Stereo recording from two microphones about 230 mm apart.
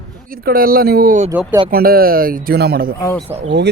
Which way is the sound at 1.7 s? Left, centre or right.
Right.